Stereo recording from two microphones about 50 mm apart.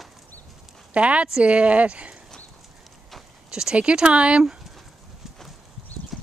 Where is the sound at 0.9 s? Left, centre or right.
Right.